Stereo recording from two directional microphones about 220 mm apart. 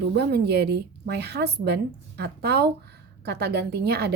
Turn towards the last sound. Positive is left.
turn(degrees=-45)  # may be behind; listen again after turning